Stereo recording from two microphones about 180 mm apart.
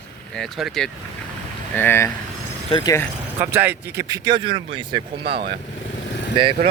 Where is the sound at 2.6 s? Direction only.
25° left (ahead or behind).